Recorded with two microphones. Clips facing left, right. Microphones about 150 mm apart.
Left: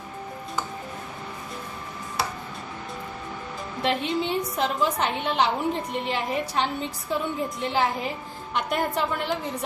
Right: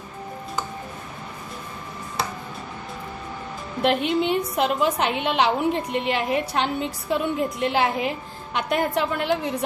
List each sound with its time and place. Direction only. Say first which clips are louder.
3.8 s a woman's voice: right 5 dB; 65° right (ahead or behind)